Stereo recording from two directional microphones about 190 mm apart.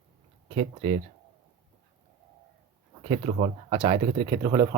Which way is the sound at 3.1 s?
35° right (ahead or behind).